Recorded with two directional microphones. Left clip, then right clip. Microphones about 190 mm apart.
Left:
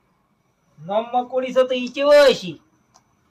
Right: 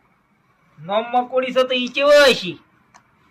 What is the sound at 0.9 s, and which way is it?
Speech, centre (ahead or behind).